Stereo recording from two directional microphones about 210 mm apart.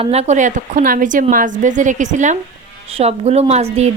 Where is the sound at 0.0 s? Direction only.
30° right (ahead or behind).